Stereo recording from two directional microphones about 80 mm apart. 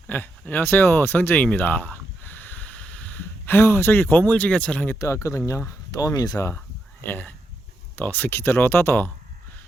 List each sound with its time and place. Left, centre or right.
0.1 s speech: left
4.9 s speech: left
7.0 s speech: left